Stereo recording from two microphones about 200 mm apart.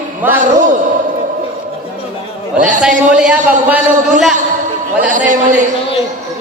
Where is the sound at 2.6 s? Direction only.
40° right (ahead or behind).